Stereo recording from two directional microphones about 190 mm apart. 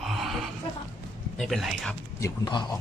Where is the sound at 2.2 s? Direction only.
20° left (ahead or behind).